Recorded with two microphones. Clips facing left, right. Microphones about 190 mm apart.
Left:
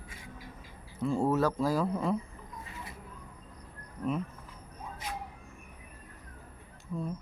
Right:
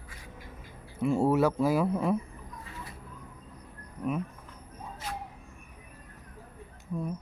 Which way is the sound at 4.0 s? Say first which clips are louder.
Right 1 dB; 5° right (ahead or behind).